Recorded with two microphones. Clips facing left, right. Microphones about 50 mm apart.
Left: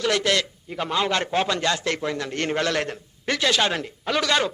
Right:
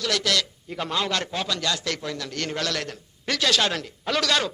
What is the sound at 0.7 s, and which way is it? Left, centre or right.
Speech, centre.